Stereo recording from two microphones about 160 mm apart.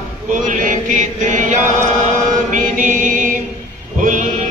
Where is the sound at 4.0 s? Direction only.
55° right (ahead or behind).